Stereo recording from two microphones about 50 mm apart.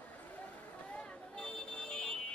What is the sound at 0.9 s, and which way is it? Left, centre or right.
Vehicle, left.